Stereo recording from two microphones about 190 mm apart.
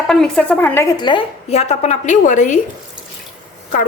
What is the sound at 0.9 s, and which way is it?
A woman's voice, 25° left (ahead or behind).